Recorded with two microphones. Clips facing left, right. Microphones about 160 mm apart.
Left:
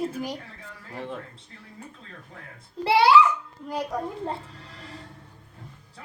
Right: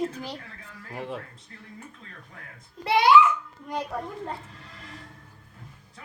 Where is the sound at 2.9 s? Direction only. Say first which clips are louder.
Left 1 dB; 30° left (ahead or behind).